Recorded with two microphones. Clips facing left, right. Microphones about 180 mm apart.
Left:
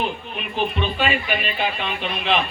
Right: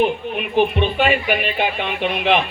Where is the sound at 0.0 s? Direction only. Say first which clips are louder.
Right 8 dB; 60° right (ahead or behind).